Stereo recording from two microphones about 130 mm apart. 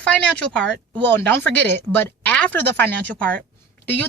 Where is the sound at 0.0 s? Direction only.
10° left (ahead or behind).